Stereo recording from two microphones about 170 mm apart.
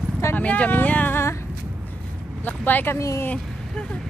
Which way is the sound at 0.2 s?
10° left (ahead or behind).